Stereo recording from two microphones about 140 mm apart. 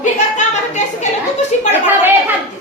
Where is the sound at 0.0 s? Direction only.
60° left (ahead or behind).